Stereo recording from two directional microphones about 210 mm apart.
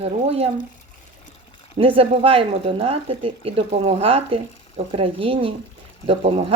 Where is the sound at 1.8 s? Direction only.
25° right (ahead or behind).